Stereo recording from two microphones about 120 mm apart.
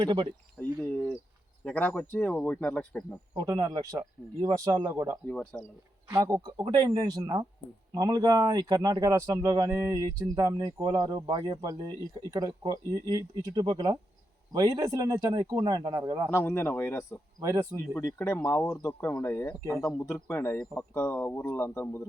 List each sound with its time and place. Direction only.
0.8 s speech: 10° left (ahead or behind)
3.3 s speech: 35° right (ahead or behind)
5.3 s speech: 10° left (ahead or behind)
6.1 s speech: 30° right (ahead or behind)
16.3 s speech: 20° left (ahead or behind)
17.4 s speech: 25° right (ahead or behind)
17.9 s speech: 20° left (ahead or behind)